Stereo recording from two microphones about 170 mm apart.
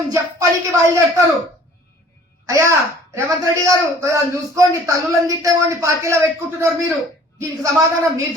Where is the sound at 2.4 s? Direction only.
15° right (ahead or behind).